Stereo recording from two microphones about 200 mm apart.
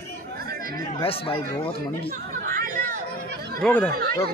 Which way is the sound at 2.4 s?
45° right (ahead or behind).